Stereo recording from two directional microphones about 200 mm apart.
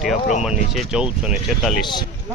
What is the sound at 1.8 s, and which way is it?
Speech, 20° left (ahead or behind).